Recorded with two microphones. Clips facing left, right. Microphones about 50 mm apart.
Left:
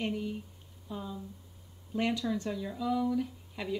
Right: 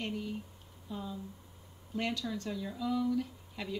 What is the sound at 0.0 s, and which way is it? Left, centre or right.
Speech, centre.